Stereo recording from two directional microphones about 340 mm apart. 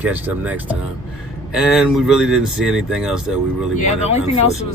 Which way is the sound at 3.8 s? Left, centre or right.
Centre.